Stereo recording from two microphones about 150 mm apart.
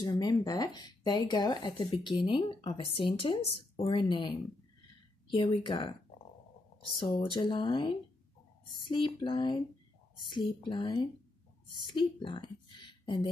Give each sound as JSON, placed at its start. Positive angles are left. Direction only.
{"t": 0.0, "sound": "speech", "side_deg": 25}
{"t": 5.3, "sound": "a woman's voice", "side_deg": 35}